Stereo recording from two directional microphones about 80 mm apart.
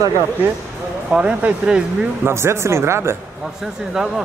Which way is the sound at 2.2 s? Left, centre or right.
Right.